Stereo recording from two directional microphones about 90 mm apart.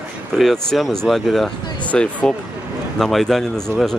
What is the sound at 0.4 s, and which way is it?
Speech, centre (ahead or behind).